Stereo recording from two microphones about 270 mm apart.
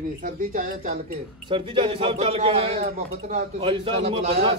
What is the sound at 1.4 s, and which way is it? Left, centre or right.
A man's voice, centre.